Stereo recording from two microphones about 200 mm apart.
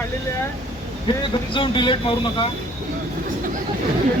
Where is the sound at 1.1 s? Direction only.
25° left (ahead or behind).